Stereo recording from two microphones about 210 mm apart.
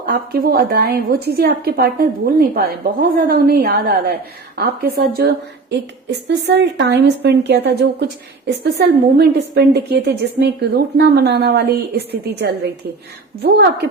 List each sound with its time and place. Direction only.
0.0 s a woman's voice: 45° right (ahead or behind)
13.4 s a woman's voice: 50° right (ahead or behind)